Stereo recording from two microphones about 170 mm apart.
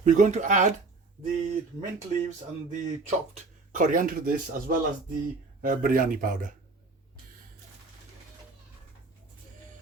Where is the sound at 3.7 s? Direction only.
50° right (ahead or behind).